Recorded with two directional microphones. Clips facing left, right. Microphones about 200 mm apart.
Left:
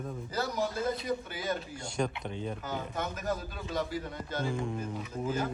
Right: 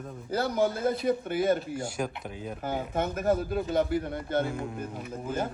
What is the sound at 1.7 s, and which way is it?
Speech, 5° right (ahead or behind).